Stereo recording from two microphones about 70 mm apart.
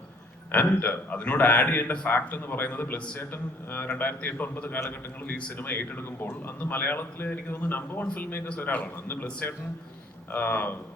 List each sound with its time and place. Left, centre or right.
0.5 s a man's voice: left